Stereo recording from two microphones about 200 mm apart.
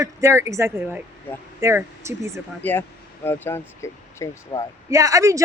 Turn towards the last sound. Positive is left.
turn(degrees=-15)  # may be behind; listen again after turning